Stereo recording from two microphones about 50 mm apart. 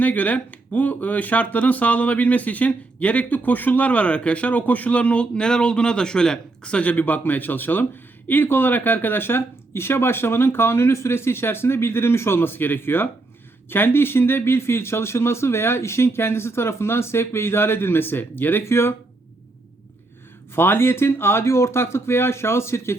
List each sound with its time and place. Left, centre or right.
0.0 s speech: left
18.6 s speech: left
20.6 s speech: left